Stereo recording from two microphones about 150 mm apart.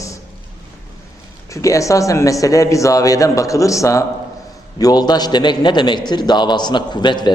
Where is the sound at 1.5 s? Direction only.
20° left (ahead or behind).